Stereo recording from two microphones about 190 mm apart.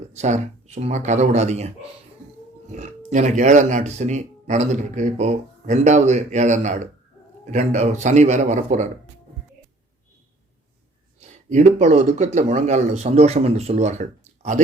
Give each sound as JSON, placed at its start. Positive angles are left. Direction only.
{"t": 0.1, "sound": "speech", "side_deg": -35}
{"t": 11.2, "sound": "speech", "side_deg": -40}